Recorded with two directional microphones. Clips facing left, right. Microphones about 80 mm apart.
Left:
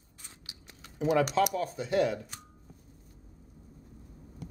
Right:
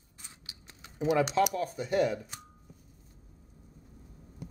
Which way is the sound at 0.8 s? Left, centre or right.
Centre.